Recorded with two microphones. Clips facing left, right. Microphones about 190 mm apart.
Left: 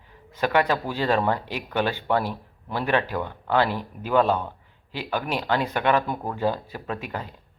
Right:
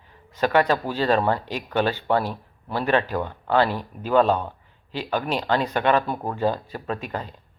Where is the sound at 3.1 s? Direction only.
15° right (ahead or behind).